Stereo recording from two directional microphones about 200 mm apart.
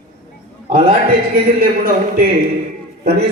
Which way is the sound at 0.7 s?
45° right (ahead or behind).